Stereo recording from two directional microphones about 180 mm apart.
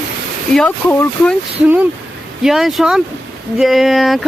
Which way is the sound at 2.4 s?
Centre (ahead or behind).